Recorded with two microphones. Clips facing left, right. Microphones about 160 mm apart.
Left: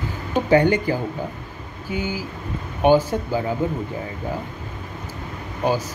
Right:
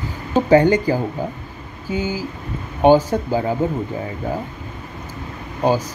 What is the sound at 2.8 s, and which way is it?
Speech, 15° right (ahead or behind).